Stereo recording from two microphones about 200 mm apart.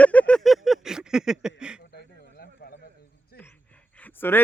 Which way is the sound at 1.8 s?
55° left (ahead or behind).